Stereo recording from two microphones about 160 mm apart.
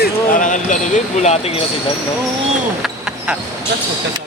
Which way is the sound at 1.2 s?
40° left (ahead or behind).